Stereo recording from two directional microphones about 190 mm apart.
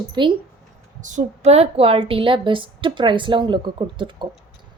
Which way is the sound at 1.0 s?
40° right (ahead or behind).